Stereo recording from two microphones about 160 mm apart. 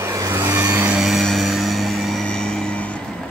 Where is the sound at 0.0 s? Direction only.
20° right (ahead or behind).